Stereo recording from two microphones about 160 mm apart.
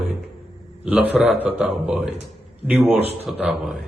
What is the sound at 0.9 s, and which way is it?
A man's voice, 10° right (ahead or behind).